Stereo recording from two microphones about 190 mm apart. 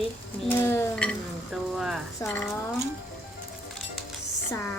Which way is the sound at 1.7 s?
Centre (ahead or behind).